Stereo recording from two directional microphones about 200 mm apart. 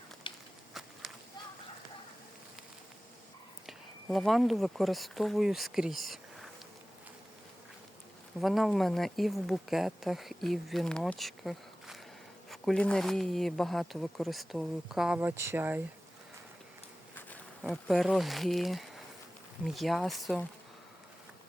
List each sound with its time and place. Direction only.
0.3 s a sound: 25° left (ahead or behind)
0.7 s walk: centre (ahead or behind)
3.7 s speech: centre (ahead or behind)
8.4 s speech: centre (ahead or behind)
17.6 s speech: centre (ahead or behind)